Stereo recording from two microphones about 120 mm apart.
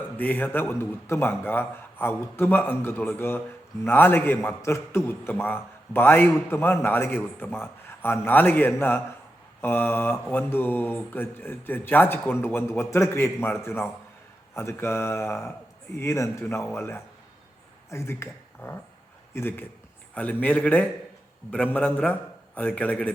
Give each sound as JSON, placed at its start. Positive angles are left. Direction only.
{"t": 0.2, "sound": "a man's voice", "side_deg": 15}